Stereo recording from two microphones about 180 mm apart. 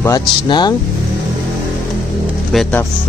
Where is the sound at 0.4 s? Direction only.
25° left (ahead or behind).